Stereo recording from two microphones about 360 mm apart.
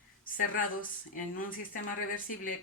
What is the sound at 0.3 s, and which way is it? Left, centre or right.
Speech, left.